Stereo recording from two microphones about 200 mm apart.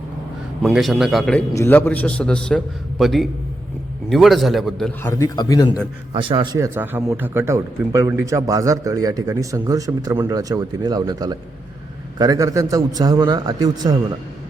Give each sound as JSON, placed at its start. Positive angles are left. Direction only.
{"t": 0.6, "sound": "a man's voice", "side_deg": 0}
{"t": 5.0, "sound": "a man's voice", "side_deg": 15}
{"t": 6.1, "sound": "a man's voice", "side_deg": -25}
{"t": 6.7, "sound": "a man's voice", "side_deg": -10}